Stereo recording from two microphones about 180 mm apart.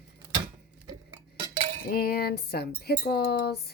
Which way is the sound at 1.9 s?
55° left (ahead or behind).